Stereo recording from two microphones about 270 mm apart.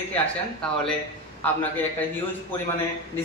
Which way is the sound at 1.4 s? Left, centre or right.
Centre.